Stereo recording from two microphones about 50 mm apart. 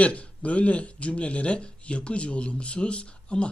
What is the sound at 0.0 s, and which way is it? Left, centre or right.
Speech, left.